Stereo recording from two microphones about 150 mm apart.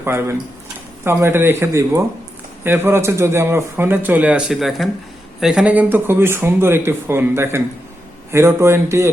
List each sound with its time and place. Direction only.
0.0 s a man's voice: 15° right (ahead or behind)